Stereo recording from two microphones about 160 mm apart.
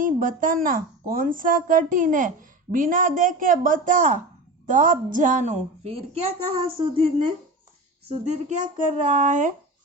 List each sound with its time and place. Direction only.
0.0 s a woman's voice: 60° right (ahead or behind); by 7.3 s 35° right (ahead or behind)
8.2 s a woman's voice: 45° right (ahead or behind)